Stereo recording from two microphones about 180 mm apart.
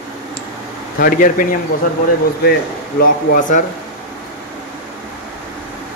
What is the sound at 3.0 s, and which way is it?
Speech, 50° left (ahead or behind).